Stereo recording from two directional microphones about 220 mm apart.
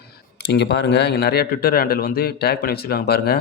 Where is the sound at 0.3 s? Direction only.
50° left (ahead or behind).